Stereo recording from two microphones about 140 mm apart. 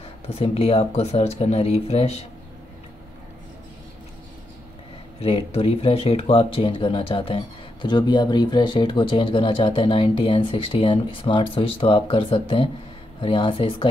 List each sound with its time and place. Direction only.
0.3 s speech: 45° left (ahead or behind)
5.2 s speech: 45° left (ahead or behind)